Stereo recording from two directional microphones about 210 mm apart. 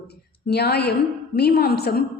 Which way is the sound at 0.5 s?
50° left (ahead or behind).